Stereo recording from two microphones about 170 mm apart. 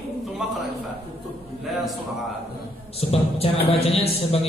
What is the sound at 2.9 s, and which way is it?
A man's voice, 35° left (ahead or behind).